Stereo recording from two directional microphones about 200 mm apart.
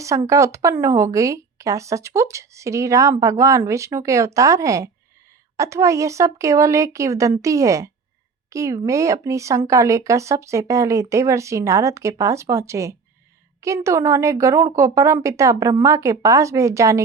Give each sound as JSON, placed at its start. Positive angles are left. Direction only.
{"t": 0.3, "sound": "speech", "side_deg": -15}